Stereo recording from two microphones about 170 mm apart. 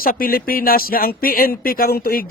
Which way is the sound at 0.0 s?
60° left (ahead or behind).